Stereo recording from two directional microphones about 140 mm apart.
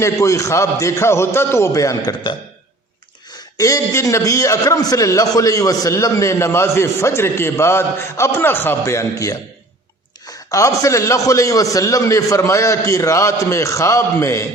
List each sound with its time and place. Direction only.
0.0 s a man's voice: 20° left (ahead or behind)
3.6 s a man's voice: 25° left (ahead or behind)